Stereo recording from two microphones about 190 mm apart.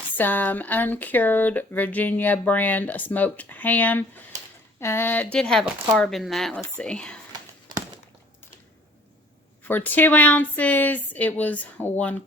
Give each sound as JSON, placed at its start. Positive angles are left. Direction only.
{"t": 0.2, "sound": "speech", "side_deg": 10}
{"t": 9.6, "sound": "speech", "side_deg": 10}